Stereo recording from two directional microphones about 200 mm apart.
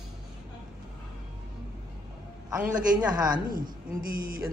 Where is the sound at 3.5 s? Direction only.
45° right (ahead or behind).